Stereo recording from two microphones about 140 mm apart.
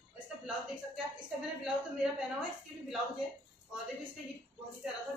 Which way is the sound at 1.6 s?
5° right (ahead or behind).